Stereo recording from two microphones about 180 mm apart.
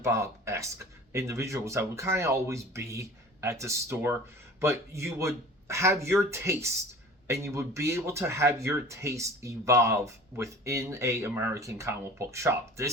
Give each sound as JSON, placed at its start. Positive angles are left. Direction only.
{"t": 0.0, "sound": "speech", "side_deg": -15}